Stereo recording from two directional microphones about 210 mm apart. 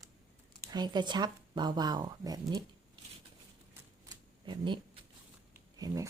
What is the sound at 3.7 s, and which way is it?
Shuffling cards, 20° right (ahead or behind).